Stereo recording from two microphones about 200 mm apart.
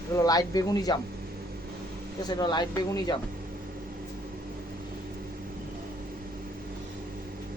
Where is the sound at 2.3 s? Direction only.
20° left (ahead or behind).